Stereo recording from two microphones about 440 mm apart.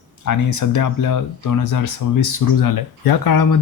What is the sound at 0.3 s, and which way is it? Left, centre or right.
Speech, left.